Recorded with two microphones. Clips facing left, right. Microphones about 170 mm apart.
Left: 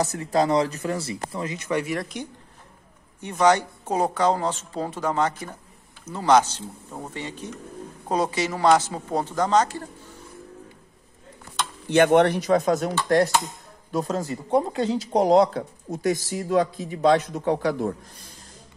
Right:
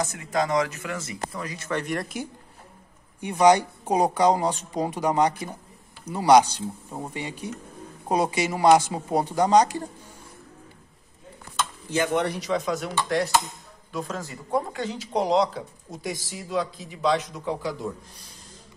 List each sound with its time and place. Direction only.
0.0 s speech: 35° left (ahead or behind); by 2.2 s centre (ahead or behind)
3.2 s speech: 15° right (ahead or behind)
11.9 s a man's voice: 65° left (ahead or behind); by 12.9 s 45° left (ahead or behind)
13.9 s speech: 35° left (ahead or behind)
15.2 s a man's voice: 50° left (ahead or behind)